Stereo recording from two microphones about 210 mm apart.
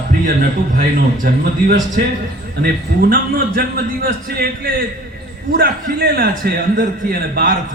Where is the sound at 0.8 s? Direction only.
45° right (ahead or behind).